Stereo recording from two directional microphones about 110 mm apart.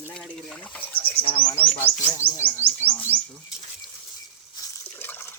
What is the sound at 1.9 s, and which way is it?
Bird, 65° right (ahead or behind).